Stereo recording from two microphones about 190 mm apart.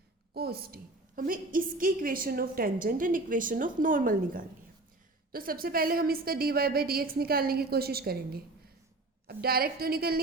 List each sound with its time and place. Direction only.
0.3 s a woman's voice: 55° right (ahead or behind)